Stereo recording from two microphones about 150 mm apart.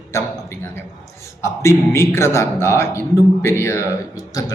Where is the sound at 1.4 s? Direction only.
20° left (ahead or behind).